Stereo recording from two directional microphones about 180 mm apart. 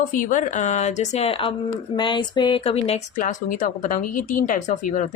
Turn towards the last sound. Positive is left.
turn(degrees=45)  # may be behind; listen again after turning